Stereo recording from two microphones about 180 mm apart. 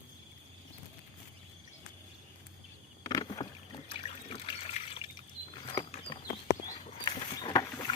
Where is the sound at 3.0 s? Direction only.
25° left (ahead or behind).